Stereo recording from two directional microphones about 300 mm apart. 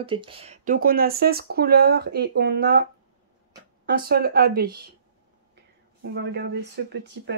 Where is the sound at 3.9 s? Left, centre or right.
Right.